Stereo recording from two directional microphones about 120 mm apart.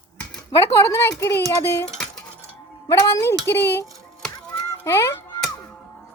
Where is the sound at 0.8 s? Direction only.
25° left (ahead or behind).